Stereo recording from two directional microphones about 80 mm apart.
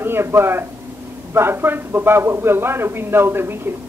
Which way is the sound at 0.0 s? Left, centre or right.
Right.